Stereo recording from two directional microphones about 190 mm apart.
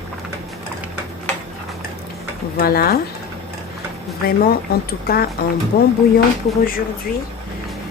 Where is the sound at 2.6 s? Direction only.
50° left (ahead or behind).